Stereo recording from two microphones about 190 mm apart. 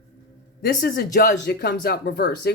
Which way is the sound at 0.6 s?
50° left (ahead or behind).